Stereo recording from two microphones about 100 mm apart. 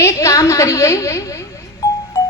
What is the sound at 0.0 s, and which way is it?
A woman's voice, 30° left (ahead or behind).